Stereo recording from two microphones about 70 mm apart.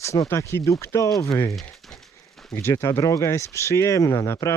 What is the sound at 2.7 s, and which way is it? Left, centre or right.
Speech, left.